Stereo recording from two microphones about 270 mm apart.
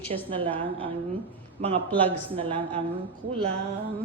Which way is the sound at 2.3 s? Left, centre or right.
Centre.